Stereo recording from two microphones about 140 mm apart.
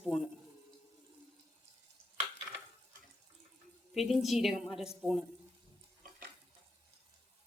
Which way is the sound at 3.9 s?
Centre (ahead or behind).